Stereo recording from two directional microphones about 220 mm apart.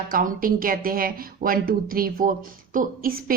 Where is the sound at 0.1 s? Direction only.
40° right (ahead or behind).